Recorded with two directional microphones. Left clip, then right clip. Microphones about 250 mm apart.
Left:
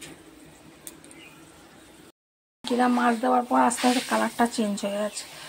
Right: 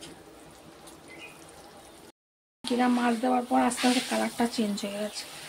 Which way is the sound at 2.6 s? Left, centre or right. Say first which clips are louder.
Left 4 dB; centre.